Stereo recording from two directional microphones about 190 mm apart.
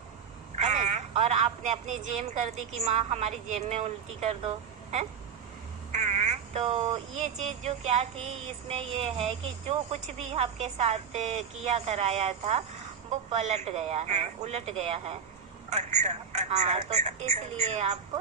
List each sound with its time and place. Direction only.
0.6 s speech: 35° right (ahead or behind)
5.9 s speech: 35° right (ahead or behind)